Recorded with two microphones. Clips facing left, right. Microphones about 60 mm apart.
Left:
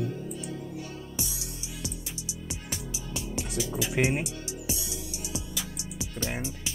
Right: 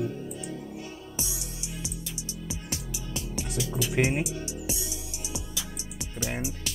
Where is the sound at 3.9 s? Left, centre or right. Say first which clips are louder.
Right 1 dB; centre.